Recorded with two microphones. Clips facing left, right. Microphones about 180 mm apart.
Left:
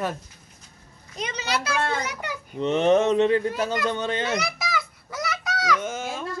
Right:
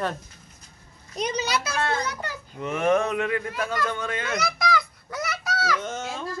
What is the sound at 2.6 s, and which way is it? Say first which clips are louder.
Speech: left 3 dB; 25° left (ahead or behind).